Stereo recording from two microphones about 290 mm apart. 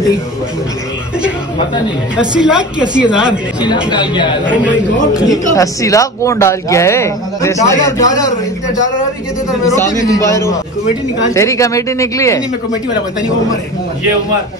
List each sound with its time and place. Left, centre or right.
2.1 s a woman's voice: centre
3.9 s speech: centre
5.5 s speech: centre
9.7 s speech: centre